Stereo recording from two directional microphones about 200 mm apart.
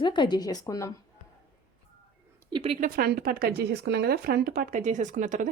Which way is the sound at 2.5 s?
30° right (ahead or behind).